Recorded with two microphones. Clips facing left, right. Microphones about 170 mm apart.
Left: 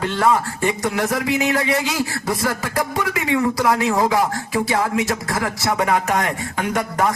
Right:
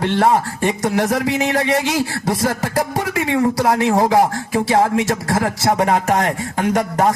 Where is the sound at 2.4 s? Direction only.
45° right (ahead or behind).